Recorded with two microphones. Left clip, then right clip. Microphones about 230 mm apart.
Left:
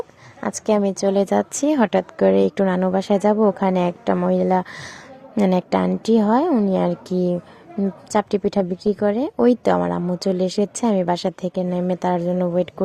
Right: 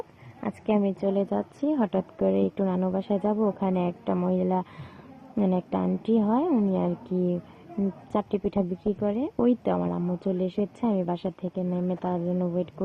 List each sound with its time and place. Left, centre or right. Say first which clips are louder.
0.7 s speech: left 7 dB; left